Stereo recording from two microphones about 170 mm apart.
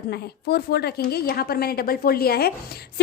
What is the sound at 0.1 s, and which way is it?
A woman's voice, 70° left (ahead or behind).